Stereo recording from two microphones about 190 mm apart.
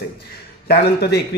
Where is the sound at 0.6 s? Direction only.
60° left (ahead or behind).